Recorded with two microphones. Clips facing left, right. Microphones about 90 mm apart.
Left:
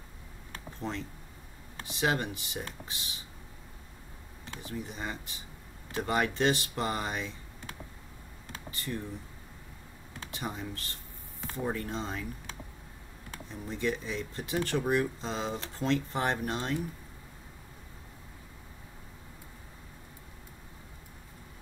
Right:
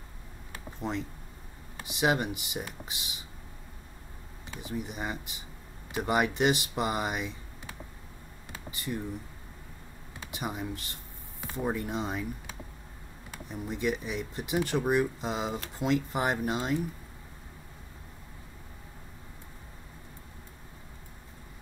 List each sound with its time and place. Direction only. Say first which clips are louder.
0.5 s a sound: right 2 dB; 15° right (ahead or behind)
1.8 s speech: right 3 dB; 15° right (ahead or behind)
4.5 s speech: right 3 dB; 15° right (ahead or behind)
8.5 s computer keyboard: right 2 dB; 15° right (ahead or behind)
10.2 s speech: right 2 dB; 15° right (ahead or behind)